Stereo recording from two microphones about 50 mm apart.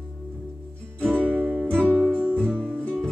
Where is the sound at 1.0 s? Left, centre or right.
Right.